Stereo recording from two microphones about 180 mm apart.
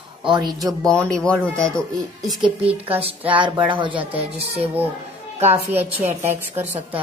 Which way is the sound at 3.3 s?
25° right (ahead or behind).